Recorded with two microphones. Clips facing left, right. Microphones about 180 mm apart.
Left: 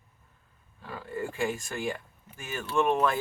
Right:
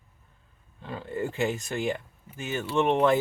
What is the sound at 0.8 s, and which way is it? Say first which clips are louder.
Speech: right 3 dB; 25° right (ahead or behind).